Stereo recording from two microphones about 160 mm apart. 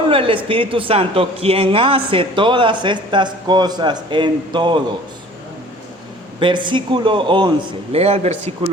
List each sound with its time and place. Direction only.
0.1 s a sound: 35° right (ahead or behind)
0.4 s speech: 35° right (ahead or behind)
6.4 s speech: 30° right (ahead or behind)